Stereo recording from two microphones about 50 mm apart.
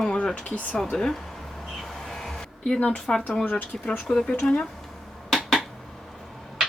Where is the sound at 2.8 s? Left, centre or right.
Centre.